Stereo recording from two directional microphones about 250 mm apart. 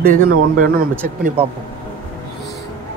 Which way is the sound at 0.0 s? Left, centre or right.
Right.